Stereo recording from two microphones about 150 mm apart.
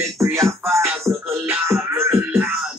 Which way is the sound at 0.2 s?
20° right (ahead or behind).